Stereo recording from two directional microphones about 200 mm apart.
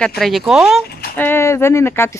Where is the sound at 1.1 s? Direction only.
10° left (ahead or behind).